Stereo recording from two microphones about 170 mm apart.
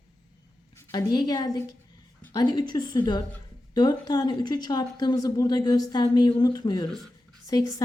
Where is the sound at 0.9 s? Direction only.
25° left (ahead or behind).